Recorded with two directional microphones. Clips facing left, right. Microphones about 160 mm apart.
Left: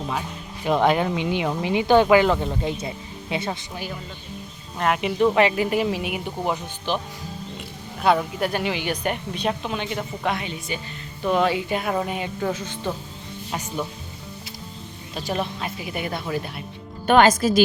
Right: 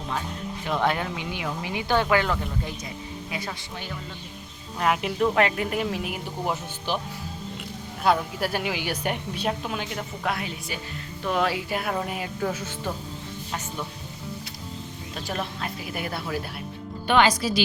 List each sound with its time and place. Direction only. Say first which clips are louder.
0.6 s a woman's voice: left 6 dB; 20° left (ahead or behind)
4.8 s a woman's voice: left 3 dB; centre (ahead or behind)
6.9 s speech: left 3 dB; 10° right (ahead or behind)
8.0 s a woman's voice: left 3 dB; centre (ahead or behind)
15.1 s a woman's voice: left 5 dB; centre (ahead or behind)
17.1 s a woman's voice: left 5 dB; 45° left (ahead or behind)